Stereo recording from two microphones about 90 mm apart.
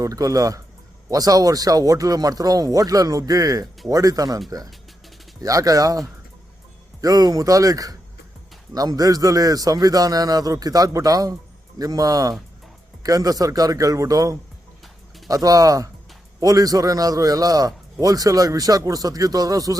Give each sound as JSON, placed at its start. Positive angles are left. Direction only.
{"t": 0.0, "sound": "a man's voice", "side_deg": -40}